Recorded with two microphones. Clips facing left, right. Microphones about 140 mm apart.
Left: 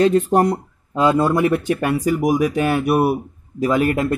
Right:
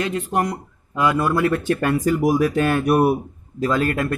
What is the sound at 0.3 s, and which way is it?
Speech, 30° left (ahead or behind).